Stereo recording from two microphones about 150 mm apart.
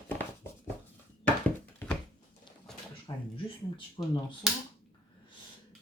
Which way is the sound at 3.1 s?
30° left (ahead or behind).